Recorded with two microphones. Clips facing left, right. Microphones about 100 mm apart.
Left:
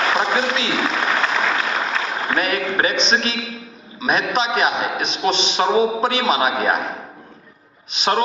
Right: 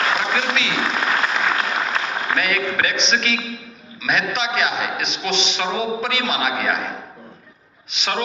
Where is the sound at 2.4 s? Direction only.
35° left (ahead or behind).